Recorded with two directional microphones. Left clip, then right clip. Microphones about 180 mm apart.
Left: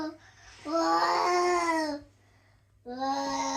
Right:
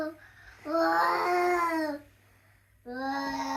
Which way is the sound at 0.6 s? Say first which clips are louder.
Right 1 dB; 5° right (ahead or behind).